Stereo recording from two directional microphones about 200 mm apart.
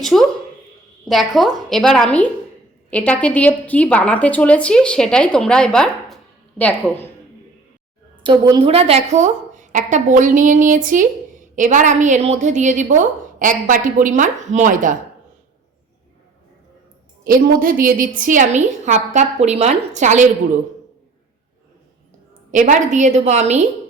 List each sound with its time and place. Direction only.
0.0 s a woman's voice: centre (ahead or behind)
8.2 s a woman's voice: 25° right (ahead or behind); by 14.9 s 40° right (ahead or behind)
17.2 s a woman's voice: 45° right (ahead or behind)
22.5 s a woman's voice: 40° right (ahead or behind)